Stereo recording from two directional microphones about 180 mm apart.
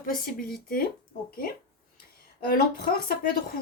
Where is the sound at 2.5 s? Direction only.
55° left (ahead or behind).